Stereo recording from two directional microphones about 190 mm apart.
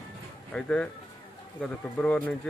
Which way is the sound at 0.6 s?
5° left (ahead or behind).